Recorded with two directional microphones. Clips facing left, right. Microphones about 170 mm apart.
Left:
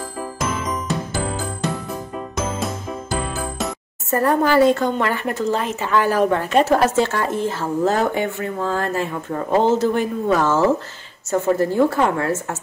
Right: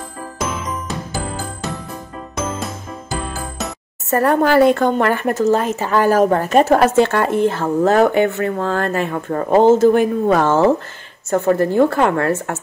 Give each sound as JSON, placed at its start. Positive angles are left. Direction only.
{"t": 0.4, "sound": "music", "side_deg": 0}
{"t": 2.3, "sound": "music", "side_deg": 0}
{"t": 4.1, "sound": "a woman's voice", "side_deg": -65}